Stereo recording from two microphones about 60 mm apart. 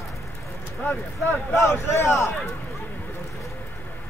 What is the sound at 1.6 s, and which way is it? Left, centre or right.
Speech, left.